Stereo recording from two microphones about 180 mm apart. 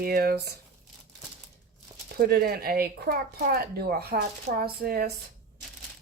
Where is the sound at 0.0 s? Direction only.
55° right (ahead or behind).